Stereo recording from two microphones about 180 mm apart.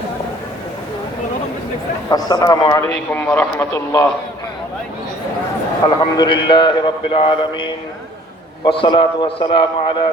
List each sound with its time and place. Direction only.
2.0 s a man's voice: 20° left (ahead or behind)
2.9 s a man's voice: 5° left (ahead or behind)
5.8 s a man's voice: 25° left (ahead or behind)